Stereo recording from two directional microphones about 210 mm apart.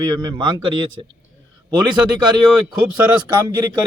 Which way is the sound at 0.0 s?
20° right (ahead or behind).